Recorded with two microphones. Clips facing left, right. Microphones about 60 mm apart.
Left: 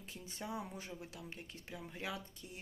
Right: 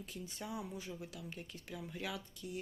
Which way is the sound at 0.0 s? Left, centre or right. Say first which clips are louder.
Right 1 dB; left.